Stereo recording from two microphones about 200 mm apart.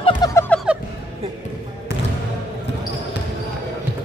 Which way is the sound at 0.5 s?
Centre (ahead or behind).